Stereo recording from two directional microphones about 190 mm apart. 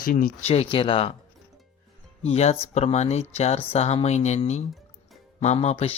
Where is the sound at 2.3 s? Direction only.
35° left (ahead or behind).